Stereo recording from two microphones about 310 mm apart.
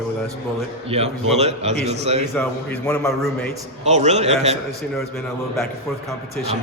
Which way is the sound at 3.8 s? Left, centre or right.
Right.